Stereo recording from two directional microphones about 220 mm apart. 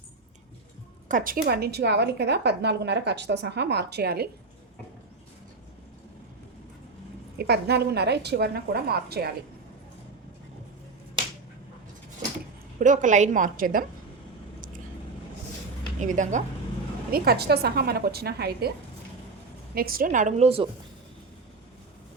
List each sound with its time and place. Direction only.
1.0 s a woman's voice: 40° right (ahead or behind)
7.3 s a woman's voice: 45° right (ahead or behind)
12.8 s a woman's voice: 35° right (ahead or behind)
16.0 s a woman's voice: 35° right (ahead or behind)
19.7 s a woman's voice: 40° right (ahead or behind); by 20.7 s 25° right (ahead or behind)